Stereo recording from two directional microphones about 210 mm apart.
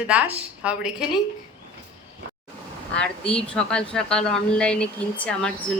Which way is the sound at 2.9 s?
5° left (ahead or behind).